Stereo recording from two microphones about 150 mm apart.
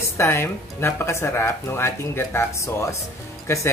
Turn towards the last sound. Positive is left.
turn(degrees=20)  # may be behind; listen again after turning